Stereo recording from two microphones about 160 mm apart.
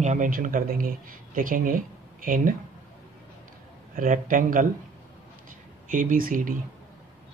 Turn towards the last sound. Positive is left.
turn(degrees=-60)  # may be behind; listen again after turning